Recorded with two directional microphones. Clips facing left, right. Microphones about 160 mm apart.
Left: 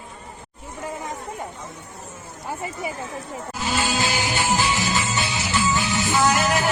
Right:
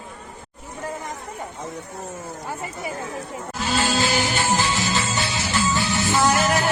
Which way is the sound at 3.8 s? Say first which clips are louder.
Right 3 dB; 15° left (ahead or behind).